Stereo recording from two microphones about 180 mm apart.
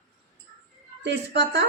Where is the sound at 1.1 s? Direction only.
75° right (ahead or behind).